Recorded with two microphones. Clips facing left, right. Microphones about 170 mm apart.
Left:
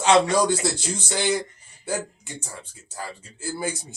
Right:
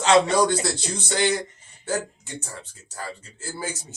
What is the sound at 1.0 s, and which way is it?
Speech, 10° left (ahead or behind).